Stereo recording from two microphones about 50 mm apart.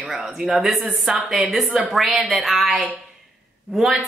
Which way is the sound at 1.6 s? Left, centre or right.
Right.